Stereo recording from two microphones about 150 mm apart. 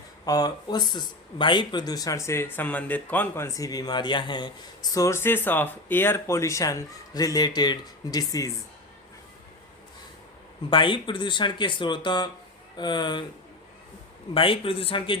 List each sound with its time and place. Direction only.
0.3 s speech: 25° left (ahead or behind)
10.7 s speech: 35° left (ahead or behind)
14.3 s speech: 35° left (ahead or behind)